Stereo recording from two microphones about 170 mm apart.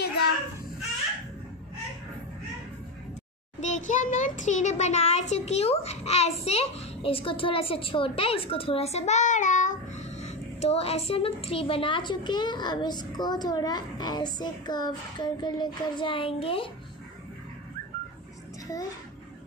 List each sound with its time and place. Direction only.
3.6 s a child's voice: 45° left (ahead or behind)